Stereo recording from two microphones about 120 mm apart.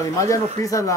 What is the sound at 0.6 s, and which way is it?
Speech, 25° left (ahead or behind).